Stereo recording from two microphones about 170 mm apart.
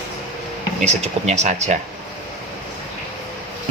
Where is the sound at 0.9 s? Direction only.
40° right (ahead or behind).